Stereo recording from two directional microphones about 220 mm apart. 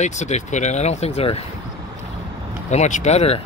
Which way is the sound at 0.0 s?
30° left (ahead or behind).